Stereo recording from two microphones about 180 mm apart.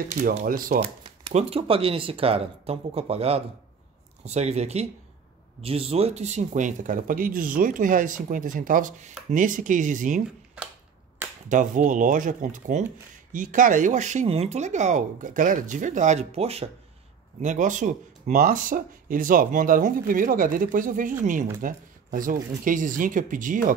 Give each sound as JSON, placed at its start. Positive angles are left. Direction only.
{"t": 0.2, "sound": "speech", "side_deg": -40}
{"t": 0.7, "sound": "speech", "side_deg": -30}
{"t": 11.4, "sound": "speech", "side_deg": -45}